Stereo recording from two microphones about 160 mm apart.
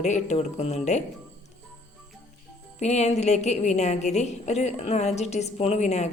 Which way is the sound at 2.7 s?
45° left (ahead or behind).